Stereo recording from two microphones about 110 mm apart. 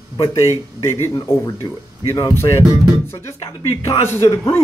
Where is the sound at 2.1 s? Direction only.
30° left (ahead or behind).